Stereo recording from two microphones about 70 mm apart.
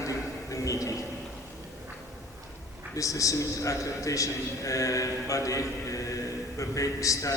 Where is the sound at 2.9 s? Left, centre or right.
Left.